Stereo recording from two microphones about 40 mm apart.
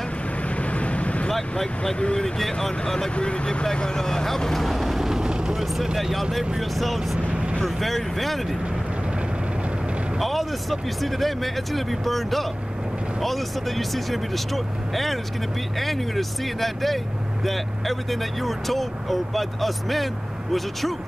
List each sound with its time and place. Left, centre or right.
0.6 s vehicle: left
1.3 s speech: centre
3.2 s speech: left; by 5.9 s centre
6.8 s speech: centre
10.1 s speech: centre